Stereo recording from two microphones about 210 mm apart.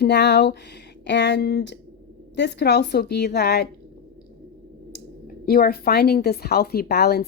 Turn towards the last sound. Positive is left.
turn(degrees=50)  # may be behind; listen again after turning